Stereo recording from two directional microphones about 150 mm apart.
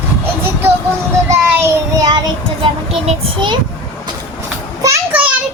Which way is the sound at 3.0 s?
35° right (ahead or behind).